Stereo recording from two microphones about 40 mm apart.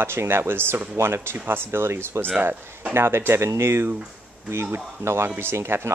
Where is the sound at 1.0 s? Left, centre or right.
Right.